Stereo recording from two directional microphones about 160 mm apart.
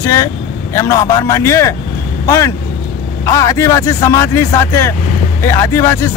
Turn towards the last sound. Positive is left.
turn(degrees=15)  # may be behind; listen again after turning